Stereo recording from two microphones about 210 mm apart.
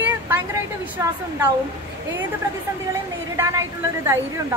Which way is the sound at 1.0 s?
15° right (ahead or behind).